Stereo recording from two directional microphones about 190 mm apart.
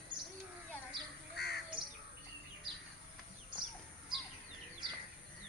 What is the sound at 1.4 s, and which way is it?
Crow, 55° left (ahead or behind).